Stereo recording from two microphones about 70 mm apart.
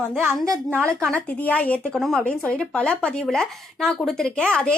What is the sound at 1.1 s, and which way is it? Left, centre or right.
Speech, centre.